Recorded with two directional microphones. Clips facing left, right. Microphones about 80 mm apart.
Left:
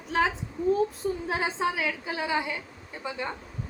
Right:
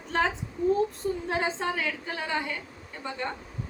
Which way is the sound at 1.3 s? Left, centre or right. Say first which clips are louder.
Left 1 dB; centre.